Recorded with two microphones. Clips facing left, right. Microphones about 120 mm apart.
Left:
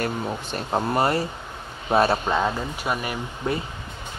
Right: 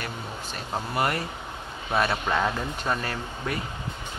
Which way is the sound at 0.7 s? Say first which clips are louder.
Left 5 dB; 35° left (ahead or behind).